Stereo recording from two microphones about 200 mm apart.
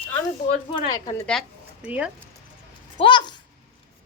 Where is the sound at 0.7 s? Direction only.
25° left (ahead or behind).